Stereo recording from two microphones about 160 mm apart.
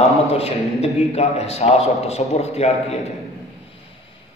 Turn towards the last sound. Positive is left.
turn(degrees=40)  # may be behind; listen again after turning